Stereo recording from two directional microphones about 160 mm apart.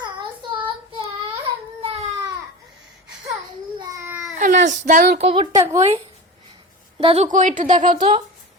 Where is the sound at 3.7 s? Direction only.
20° right (ahead or behind).